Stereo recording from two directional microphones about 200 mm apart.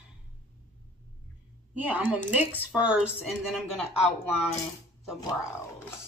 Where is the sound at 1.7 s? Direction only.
10° right (ahead or behind).